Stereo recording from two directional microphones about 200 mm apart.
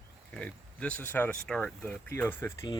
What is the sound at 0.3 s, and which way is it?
Speech, 5° left (ahead or behind).